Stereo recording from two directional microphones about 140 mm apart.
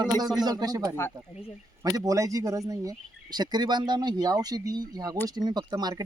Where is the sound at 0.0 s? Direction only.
30° right (ahead or behind).